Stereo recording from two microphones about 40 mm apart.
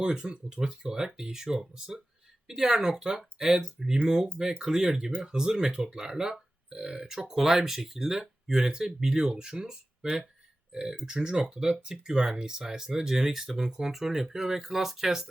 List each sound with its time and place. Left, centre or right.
0.0 s speech: right